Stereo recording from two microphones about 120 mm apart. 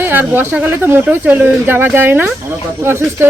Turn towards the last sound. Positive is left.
turn(degrees=-20)  # may be behind; listen again after turning